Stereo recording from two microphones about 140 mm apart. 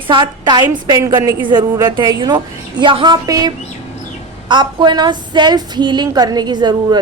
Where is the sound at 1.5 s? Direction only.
30° right (ahead or behind).